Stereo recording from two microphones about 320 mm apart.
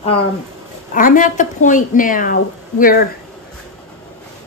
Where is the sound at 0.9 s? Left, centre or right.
Left.